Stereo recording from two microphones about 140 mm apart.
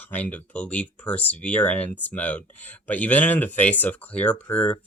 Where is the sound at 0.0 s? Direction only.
10° left (ahead or behind).